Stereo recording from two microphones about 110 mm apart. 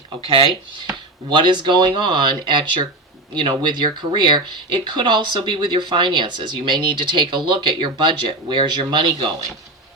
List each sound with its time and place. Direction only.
0.3 s speech: 55° right (ahead or behind)
1.3 s speech: 45° right (ahead or behind)